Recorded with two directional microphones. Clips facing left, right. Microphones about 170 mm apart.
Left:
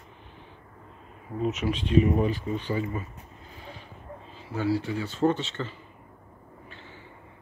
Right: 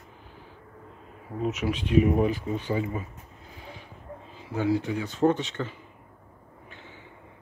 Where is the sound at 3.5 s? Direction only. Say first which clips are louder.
Even; 15° right (ahead or behind).